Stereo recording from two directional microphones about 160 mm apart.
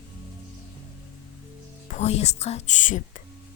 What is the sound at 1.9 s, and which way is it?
Speech, 45° left (ahead or behind).